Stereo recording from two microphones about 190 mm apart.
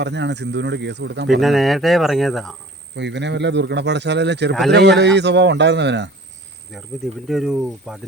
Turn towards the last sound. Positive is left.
turn(degrees=0)  # may be behind; listen again after turning